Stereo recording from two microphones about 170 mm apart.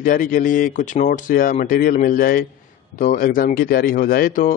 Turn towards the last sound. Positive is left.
turn(degrees=55)  # may be behind; listen again after turning